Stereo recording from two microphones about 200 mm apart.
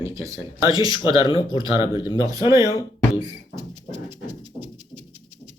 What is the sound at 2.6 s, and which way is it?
Speech, 20° left (ahead or behind).